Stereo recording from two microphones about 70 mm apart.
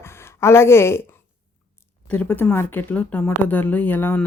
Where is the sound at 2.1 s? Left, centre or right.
Left.